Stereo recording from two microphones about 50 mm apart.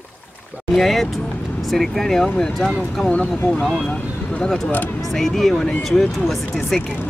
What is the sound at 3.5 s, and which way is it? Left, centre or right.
Speech, centre.